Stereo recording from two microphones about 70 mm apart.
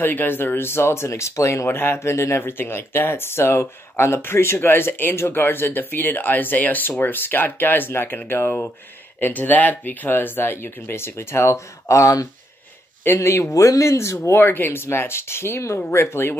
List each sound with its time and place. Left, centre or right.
0.0 s speech: left
13.0 s speech: left